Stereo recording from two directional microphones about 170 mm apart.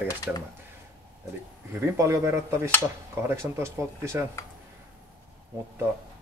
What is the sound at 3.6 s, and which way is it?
Speech, 15° right (ahead or behind).